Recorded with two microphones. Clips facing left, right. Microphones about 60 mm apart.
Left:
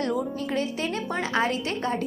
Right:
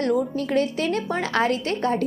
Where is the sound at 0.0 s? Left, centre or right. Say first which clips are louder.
Right 5 dB; right.